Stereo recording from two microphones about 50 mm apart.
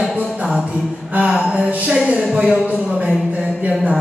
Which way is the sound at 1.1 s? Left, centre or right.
Right.